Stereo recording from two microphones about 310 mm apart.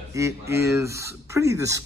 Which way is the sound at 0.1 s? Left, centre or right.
Centre.